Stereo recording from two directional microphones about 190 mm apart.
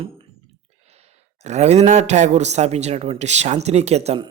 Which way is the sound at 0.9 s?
35° right (ahead or behind).